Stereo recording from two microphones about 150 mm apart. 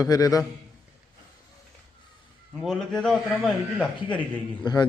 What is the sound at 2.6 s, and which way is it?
A man's voice, centre (ahead or behind).